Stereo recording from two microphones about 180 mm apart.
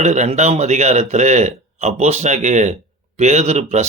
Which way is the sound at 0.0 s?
40° right (ahead or behind).